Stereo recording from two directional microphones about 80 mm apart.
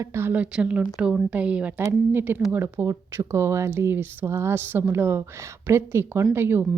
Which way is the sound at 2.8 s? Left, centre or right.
Right.